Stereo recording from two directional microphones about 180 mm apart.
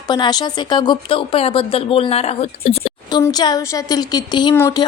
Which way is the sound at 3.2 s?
20° left (ahead or behind).